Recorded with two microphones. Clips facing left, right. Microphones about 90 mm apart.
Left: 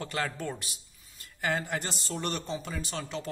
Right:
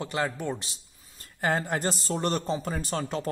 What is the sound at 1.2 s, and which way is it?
A man's voice, 35° right (ahead or behind).